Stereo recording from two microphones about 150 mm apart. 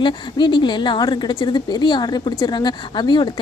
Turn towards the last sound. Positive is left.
turn(degrees=30)  # may be behind; listen again after turning